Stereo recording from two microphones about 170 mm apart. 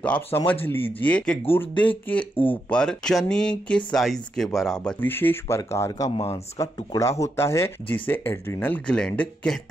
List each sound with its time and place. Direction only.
0.0 s speech: 5° left (ahead or behind)